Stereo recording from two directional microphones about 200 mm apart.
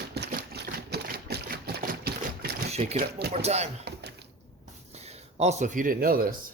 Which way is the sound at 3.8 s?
60° right (ahead or behind).